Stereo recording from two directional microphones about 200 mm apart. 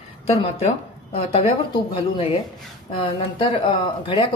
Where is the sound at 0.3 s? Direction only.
30° left (ahead or behind).